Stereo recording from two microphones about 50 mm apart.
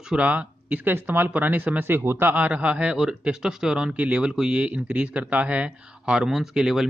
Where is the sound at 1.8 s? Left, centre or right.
Right.